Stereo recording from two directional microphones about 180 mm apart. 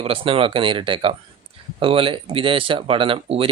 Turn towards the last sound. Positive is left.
turn(degrees=-30)  # may be behind; listen again after turning